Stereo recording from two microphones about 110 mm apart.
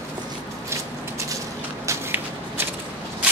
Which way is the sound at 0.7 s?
25° right (ahead or behind).